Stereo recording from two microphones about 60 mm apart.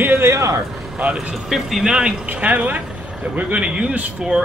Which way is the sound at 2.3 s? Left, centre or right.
Right.